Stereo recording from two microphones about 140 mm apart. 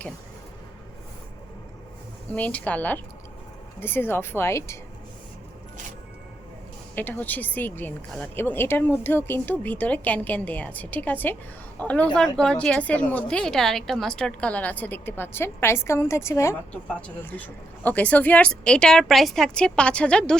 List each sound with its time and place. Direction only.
2.3 s a woman's voice: 10° left (ahead or behind)
6.9 s a woman's voice: 10° left (ahead or behind)